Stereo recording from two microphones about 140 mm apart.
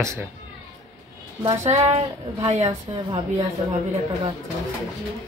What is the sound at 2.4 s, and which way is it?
Speech, 50° right (ahead or behind).